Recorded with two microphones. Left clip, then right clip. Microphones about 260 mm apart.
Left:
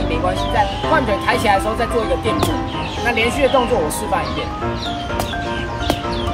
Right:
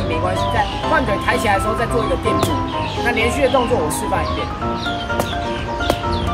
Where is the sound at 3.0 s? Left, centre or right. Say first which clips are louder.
Left 1 dB; centre.